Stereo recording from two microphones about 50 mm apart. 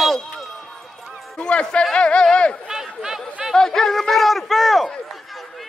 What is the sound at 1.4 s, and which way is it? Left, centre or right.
Speech, left.